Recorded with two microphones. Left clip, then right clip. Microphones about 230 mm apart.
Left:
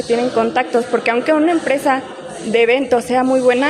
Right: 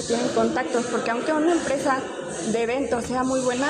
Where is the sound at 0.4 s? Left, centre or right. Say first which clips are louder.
Left 7 dB; left.